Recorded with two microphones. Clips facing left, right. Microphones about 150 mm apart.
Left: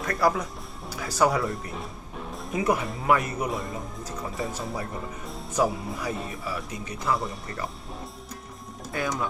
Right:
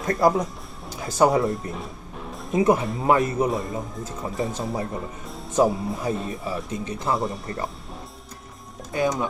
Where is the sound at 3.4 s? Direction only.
Centre (ahead or behind).